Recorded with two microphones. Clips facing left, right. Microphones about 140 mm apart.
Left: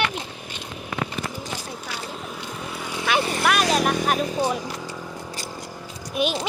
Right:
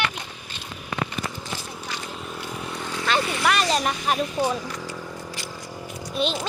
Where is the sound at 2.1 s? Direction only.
Centre (ahead or behind).